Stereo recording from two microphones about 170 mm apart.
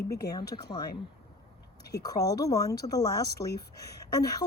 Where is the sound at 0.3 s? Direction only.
25° left (ahead or behind).